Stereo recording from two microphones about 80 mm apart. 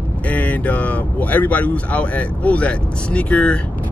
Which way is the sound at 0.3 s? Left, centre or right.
Centre.